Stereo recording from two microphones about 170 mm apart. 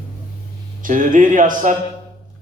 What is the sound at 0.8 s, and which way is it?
Speech, 50° right (ahead or behind).